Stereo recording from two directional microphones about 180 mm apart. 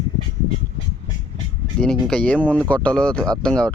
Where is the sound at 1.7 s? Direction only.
5° left (ahead or behind).